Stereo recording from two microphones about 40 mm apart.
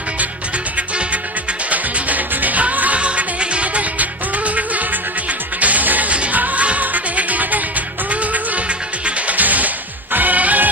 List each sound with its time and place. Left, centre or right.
0.7 s music: right
3.0 s music: right
9.4 s music: right